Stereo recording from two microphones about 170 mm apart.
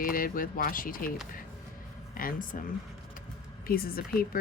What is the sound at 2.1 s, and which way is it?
Speech, 55° left (ahead or behind).